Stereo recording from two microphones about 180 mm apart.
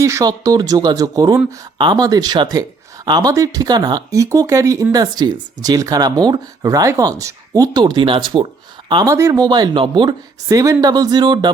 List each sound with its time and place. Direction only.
0.0 s speech: 15° right (ahead or behind)